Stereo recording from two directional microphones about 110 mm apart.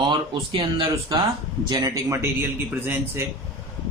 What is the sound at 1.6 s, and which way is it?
A man's voice, 35° right (ahead or behind).